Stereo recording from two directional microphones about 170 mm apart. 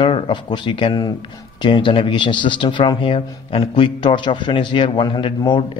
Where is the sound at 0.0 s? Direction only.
30° left (ahead or behind).